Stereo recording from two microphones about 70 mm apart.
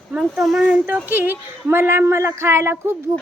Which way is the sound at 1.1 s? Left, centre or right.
Right.